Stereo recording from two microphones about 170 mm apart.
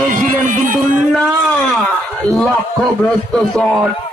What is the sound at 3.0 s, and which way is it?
Speech, 5° left (ahead or behind).